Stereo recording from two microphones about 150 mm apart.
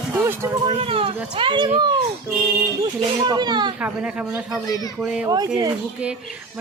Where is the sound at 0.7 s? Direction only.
40° right (ahead or behind).